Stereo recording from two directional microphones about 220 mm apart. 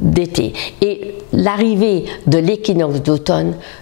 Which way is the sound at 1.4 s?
15° left (ahead or behind).